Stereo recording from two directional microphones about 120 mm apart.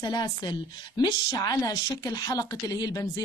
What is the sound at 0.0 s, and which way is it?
A woman's voice, 35° left (ahead or behind).